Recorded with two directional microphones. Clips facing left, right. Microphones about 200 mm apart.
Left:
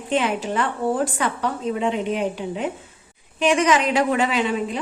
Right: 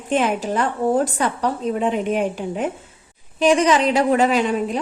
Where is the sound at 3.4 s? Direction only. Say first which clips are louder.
Right 3 dB; 35° right (ahead or behind).